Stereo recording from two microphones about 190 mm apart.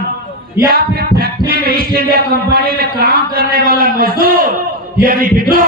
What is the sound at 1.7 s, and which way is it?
A man's voice, 55° right (ahead or behind).